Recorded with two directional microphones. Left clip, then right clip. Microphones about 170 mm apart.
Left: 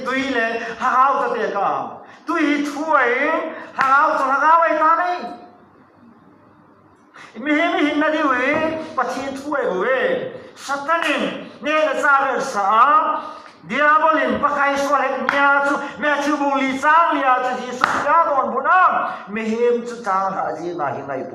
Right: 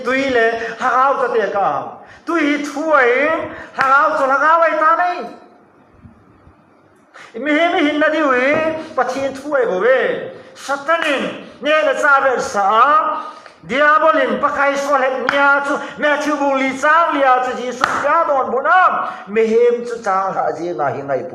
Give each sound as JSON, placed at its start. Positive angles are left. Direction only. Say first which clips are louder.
{"t": 0.0, "sound": "a man's voice", "louder": "right 6 dB", "side_deg": -30}
{"t": 7.4, "sound": "a man's voice", "louder": "right 3 dB", "side_deg": -30}